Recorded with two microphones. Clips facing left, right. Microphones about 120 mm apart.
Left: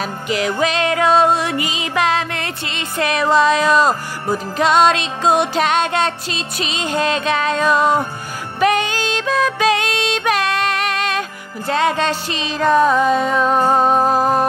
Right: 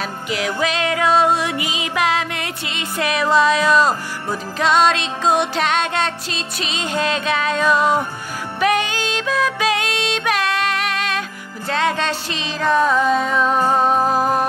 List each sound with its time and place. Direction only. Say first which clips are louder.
0.0 s music: left 3 dB; centre (ahead or behind)
13.6 s music: left 2 dB; 25° left (ahead or behind)